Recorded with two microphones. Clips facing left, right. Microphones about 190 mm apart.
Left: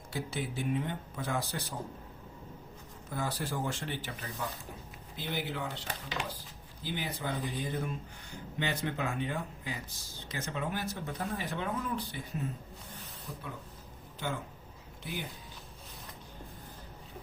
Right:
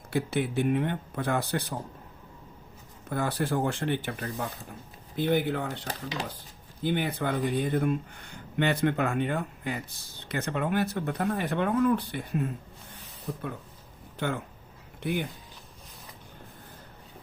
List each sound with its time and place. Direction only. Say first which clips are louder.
0.1 s speech: right 9 dB; 60° right (ahead or behind)
3.1 s speech: right 7 dB; 60° right (ahead or behind)